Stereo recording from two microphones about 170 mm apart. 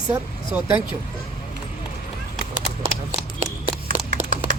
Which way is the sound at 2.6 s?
50° right (ahead or behind).